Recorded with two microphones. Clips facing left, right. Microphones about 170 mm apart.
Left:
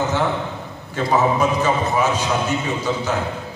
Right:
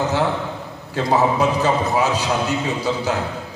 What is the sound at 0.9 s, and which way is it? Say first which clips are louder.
A man's voice: even; 35° right (ahead or behind).